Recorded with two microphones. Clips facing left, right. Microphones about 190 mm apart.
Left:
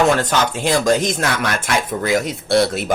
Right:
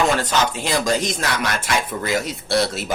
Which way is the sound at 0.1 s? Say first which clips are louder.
Left 3 dB; 50° left (ahead or behind).